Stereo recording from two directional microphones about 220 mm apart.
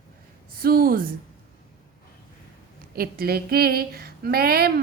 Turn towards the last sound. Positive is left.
turn(degrees=-45)  # may be behind; listen again after turning